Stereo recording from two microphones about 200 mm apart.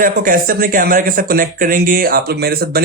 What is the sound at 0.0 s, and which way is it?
Speech, 45° right (ahead or behind).